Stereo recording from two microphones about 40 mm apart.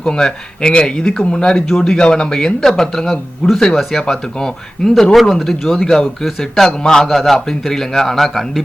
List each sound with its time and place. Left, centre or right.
0.0 s speech: centre
1.6 s speech: centre
2.0 s speech: left
4.0 s speech: centre
5.1 s speech: centre
6.8 s speech: centre